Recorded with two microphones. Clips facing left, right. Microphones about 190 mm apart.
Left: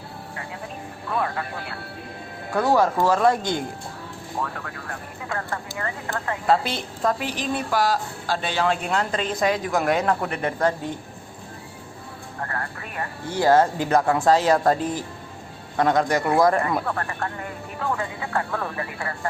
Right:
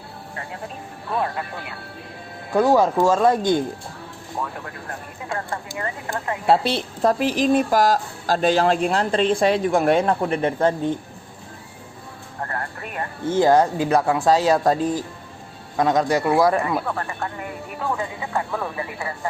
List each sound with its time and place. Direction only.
2.5 s a woman's voice: 15° right (ahead or behind)
5.3 s a woman's voice: 25° right (ahead or behind)
13.0 s speech: 20° right (ahead or behind)